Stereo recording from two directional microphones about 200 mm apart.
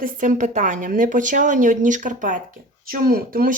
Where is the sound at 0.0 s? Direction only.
40° right (ahead or behind).